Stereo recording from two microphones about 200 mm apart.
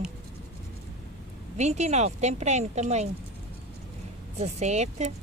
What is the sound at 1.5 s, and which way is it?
Speech, 35° right (ahead or behind).